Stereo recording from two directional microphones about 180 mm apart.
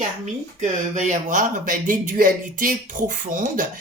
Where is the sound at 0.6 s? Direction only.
40° right (ahead or behind).